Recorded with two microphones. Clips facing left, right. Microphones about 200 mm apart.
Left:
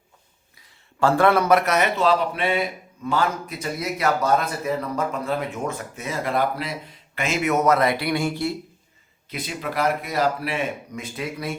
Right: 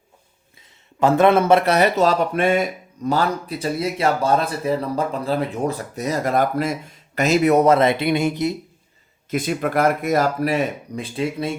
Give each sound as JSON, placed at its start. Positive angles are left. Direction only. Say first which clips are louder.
{"t": 0.9, "sound": "speech", "louder": "right 3 dB", "side_deg": -20}
{"t": 9.3, "sound": "speech", "louder": "right 8 dB", "side_deg": -50}